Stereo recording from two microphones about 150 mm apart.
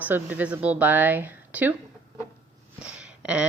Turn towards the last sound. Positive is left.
turn(degrees=-5)  # may be behind; listen again after turning